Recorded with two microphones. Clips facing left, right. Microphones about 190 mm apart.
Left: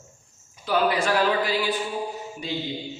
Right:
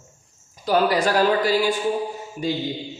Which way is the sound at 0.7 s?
40° right (ahead or behind).